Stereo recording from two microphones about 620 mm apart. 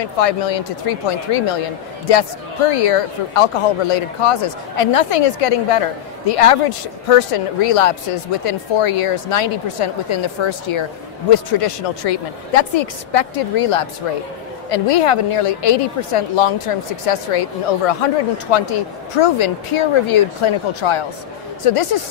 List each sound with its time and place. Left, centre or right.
0.0 s speech: left
2.7 s a woman's voice: left